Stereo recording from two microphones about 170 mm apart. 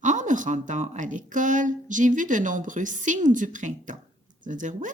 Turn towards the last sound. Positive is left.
turn(degrees=-50)  # may be behind; listen again after turning